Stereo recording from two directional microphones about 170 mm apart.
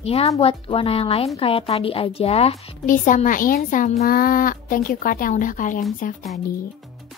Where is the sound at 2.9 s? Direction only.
50° left (ahead or behind).